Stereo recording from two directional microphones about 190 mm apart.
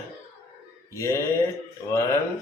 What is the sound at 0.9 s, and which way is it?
Mantra, 15° left (ahead or behind).